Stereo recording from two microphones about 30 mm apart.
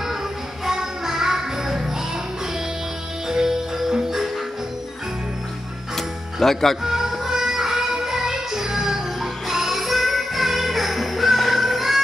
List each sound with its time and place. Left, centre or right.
0.7 s music: centre
3.4 s music: centre
5.9 s music: centre
6.8 s music: centre